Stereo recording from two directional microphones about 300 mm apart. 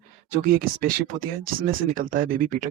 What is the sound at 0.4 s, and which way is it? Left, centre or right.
Speech, right.